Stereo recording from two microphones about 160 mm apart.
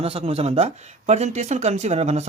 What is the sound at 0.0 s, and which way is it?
Speech, 35° right (ahead or behind).